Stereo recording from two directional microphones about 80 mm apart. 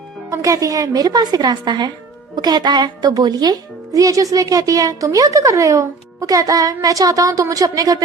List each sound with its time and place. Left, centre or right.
0.3 s a woman's voice: right